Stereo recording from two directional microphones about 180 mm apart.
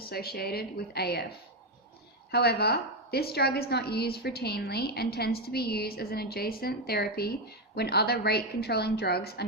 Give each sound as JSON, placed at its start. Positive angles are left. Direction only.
{"t": 0.0, "sound": "a woman's voice", "side_deg": 60}
{"t": 2.3, "sound": "a woman's voice", "side_deg": 60}